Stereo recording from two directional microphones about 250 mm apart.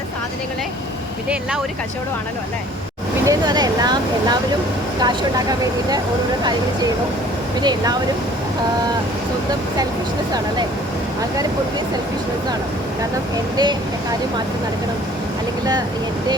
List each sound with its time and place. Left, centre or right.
1.3 s speech: centre
3.2 s speech: centre
7.6 s speech: centre
13.6 s speech: centre